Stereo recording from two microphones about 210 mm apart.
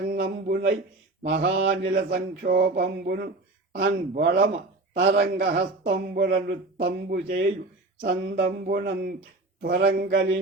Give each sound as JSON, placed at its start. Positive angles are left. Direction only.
{"t": 0.1, "sound": "speech", "side_deg": -45}
{"t": 1.3, "sound": "mantra", "side_deg": -55}
{"t": 1.9, "sound": "a man's voice", "side_deg": -45}
{"t": 4.9, "sound": "a man's voice", "side_deg": -55}